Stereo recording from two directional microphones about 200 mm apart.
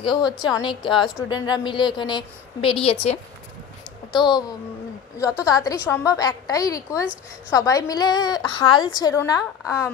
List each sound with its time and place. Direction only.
0.0 s a woman's voice: 25° left (ahead or behind)